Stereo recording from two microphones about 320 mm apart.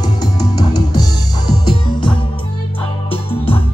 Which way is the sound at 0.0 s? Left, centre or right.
Centre.